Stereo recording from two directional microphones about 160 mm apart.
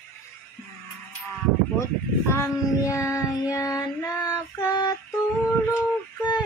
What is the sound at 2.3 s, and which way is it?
Child singing, 15° left (ahead or behind).